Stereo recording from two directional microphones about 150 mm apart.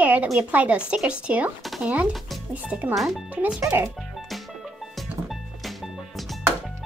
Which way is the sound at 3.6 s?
15° right (ahead or behind).